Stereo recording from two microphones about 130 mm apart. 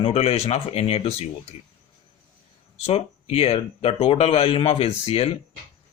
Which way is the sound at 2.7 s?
50° left (ahead or behind).